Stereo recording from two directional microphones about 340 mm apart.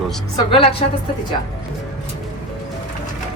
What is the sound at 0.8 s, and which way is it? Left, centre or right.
Speech, centre.